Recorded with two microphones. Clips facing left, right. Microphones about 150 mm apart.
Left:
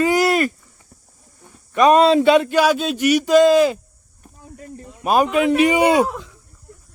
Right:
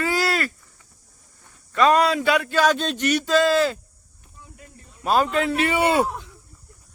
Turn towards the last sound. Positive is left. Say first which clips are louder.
# left 5 dB
turn(degrees=15)  # may be behind; listen again after turning